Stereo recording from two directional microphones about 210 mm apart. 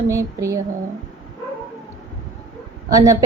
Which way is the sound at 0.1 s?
15° right (ahead or behind).